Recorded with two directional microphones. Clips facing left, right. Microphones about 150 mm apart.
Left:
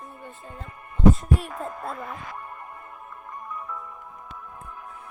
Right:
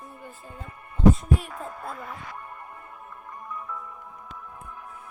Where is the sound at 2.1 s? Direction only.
50° left (ahead or behind).